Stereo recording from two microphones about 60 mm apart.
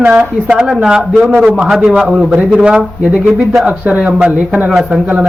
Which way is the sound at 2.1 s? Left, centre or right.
Centre.